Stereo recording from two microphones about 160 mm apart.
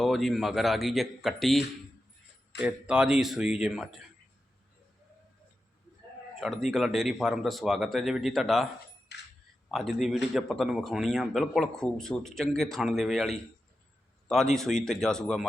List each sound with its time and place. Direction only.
0.0 s a man's voice: centre (ahead or behind)
6.4 s a man's voice: centre (ahead or behind)
9.1 s a sound: 90° left
9.7 s a man's voice: centre (ahead or behind)